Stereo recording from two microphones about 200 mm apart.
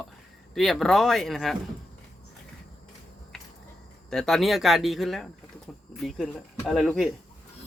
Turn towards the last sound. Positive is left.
turn(degrees=0)  # may be behind; listen again after turning